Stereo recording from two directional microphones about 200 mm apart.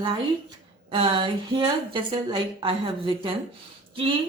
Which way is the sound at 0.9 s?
25° right (ahead or behind).